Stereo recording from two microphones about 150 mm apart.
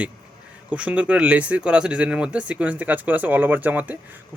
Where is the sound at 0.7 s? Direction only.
10° right (ahead or behind).